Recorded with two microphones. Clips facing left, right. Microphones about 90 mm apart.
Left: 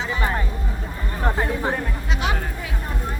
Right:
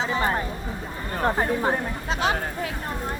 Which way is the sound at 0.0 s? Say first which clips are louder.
Right 1 dB; 30° right (ahead or behind).